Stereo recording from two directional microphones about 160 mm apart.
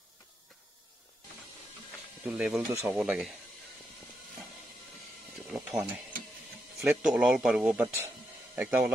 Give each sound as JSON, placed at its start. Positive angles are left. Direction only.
{"t": 2.2, "sound": "speech", "side_deg": -5}
{"t": 2.7, "sound": "speech", "side_deg": -15}
{"t": 3.0, "sound": "speech", "side_deg": -5}
{"t": 5.5, "sound": "a sound", "side_deg": -5}
{"t": 6.8, "sound": "speech", "side_deg": -5}